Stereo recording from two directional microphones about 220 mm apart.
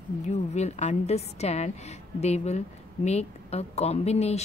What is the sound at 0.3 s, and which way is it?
Speech, 30° left (ahead or behind).